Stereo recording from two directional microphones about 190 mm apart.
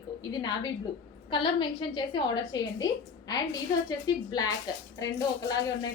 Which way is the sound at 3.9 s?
20° left (ahead or behind).